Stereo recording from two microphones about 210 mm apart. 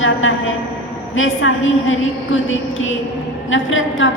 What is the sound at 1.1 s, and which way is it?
A woman's voice, 70° left (ahead or behind).